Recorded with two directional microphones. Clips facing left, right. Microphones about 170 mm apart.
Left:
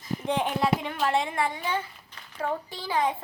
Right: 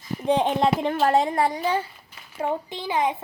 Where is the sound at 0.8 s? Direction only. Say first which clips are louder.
Right 6 dB; 45° right (ahead or behind).